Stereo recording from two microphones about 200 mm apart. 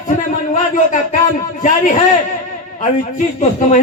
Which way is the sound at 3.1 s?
40° left (ahead or behind).